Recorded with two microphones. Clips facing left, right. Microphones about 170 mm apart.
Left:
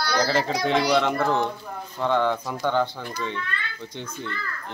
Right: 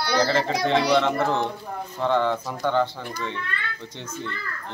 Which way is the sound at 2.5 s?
10° right (ahead or behind).